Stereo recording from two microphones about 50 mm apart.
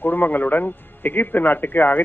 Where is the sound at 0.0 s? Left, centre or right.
Left.